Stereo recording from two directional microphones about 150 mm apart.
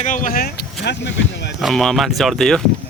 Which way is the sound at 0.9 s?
90° left.